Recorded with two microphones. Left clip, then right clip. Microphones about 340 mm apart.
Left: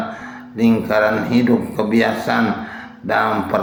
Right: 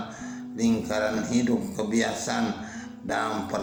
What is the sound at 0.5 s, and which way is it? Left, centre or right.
Speech, right.